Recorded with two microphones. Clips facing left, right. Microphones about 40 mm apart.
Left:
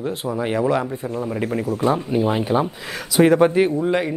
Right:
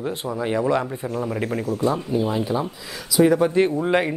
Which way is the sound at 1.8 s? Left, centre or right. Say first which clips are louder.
Left 3 dB; left.